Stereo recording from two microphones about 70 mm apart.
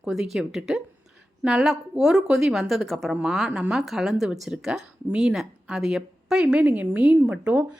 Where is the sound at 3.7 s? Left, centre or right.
Centre.